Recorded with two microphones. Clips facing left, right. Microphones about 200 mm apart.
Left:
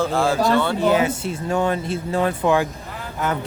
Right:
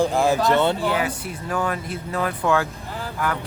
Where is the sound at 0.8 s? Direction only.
25° left (ahead or behind).